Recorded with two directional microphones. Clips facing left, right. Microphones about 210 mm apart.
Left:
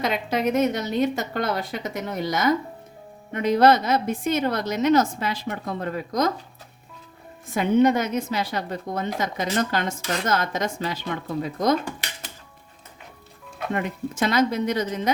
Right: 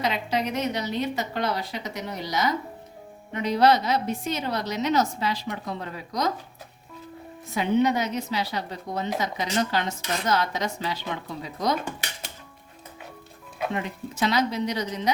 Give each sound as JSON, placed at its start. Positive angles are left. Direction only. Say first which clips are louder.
{"t": 0.0, "sound": "a woman's voice", "louder": "left 3 dB", "side_deg": 50}
{"t": 7.5, "sound": "a woman's voice", "louder": "left 4 dB", "side_deg": 50}
{"t": 13.7, "sound": "a woman's voice", "louder": "left 3 dB", "side_deg": 50}